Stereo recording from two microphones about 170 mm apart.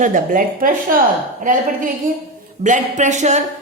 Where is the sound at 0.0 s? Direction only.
50° right (ahead or behind).